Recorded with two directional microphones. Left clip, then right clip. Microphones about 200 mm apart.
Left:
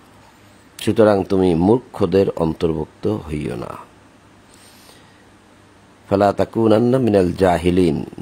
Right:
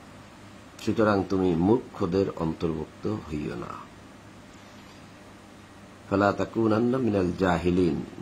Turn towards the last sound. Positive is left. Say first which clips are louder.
# left 9 dB
turn(degrees=50)  # may be behind; listen again after turning